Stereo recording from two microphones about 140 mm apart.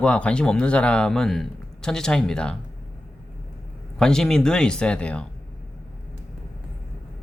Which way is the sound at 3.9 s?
5° left (ahead or behind).